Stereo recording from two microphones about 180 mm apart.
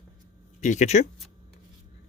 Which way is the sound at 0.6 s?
40° left (ahead or behind).